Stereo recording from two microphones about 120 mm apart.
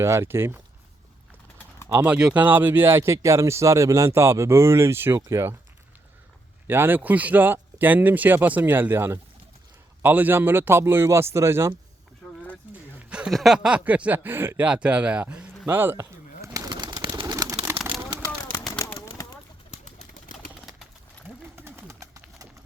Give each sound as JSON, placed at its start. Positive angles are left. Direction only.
{"t": 0.0, "sound": "speech", "side_deg": -25}
{"t": 1.9, "sound": "speech", "side_deg": -20}
{"t": 6.7, "sound": "speech", "side_deg": -15}
{"t": 12.7, "sound": "speech", "side_deg": -10}
{"t": 15.6, "sound": "bird", "side_deg": -15}
{"t": 17.3, "sound": "pigeon", "side_deg": -30}
{"t": 18.9, "sound": "bird", "side_deg": 30}
{"t": 19.7, "sound": "bird", "side_deg": 75}
{"t": 21.5, "sound": "bird", "side_deg": -20}